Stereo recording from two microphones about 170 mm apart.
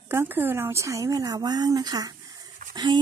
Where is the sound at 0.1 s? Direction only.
15° right (ahead or behind).